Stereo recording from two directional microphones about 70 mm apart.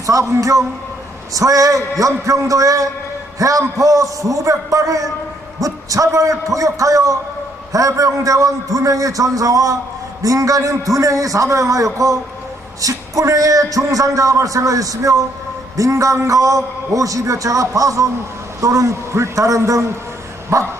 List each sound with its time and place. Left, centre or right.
0.0 s a man's voice: right